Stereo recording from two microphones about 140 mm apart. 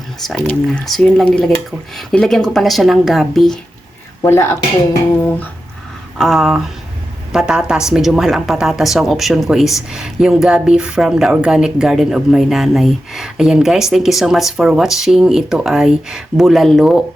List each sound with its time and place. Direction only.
0.3 s speech: centre (ahead or behind)
4.2 s speech: 20° left (ahead or behind)
6.1 s speech: centre (ahead or behind)